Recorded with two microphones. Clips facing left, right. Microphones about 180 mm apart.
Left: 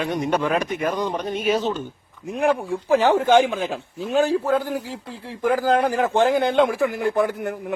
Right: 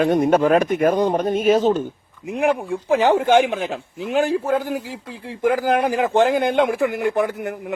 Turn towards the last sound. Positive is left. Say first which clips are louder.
# right 1 dB
turn(degrees=-20)  # may be behind; listen again after turning